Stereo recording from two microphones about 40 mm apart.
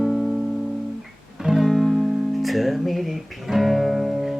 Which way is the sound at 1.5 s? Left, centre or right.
Centre.